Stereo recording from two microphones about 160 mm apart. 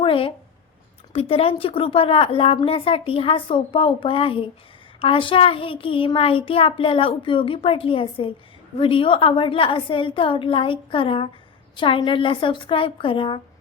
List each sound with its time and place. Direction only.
0.0 s a woman's voice: 35° left (ahead or behind)